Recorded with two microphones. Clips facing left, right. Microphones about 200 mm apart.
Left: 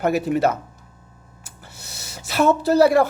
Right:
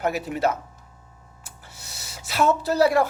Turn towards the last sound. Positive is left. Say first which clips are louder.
# left 4 dB
turn(degrees=55)  # may be behind; listen again after turning